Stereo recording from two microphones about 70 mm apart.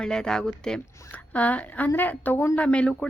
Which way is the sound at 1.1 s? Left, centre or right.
Left.